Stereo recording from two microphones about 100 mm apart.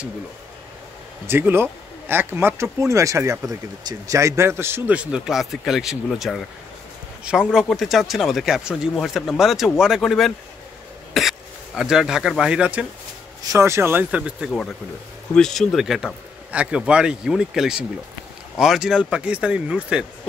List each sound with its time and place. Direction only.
1.2 s speech: 25° right (ahead or behind)
4.9 s speech: 5° right (ahead or behind)
13.4 s speech: 30° right (ahead or behind); by 14.5 s 10° right (ahead or behind)
15.3 s speech: 5° left (ahead or behind); by 20.1 s 10° right (ahead or behind)